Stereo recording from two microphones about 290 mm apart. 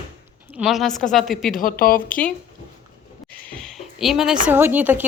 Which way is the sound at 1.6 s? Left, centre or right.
Left.